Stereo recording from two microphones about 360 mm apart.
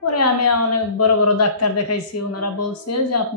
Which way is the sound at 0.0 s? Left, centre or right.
Left.